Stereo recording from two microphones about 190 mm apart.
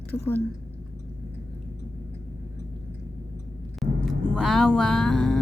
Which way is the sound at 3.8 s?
Centre (ahead or behind).